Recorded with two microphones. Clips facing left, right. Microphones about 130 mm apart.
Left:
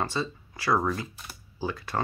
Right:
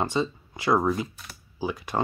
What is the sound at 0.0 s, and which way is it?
Speech, 20° right (ahead or behind).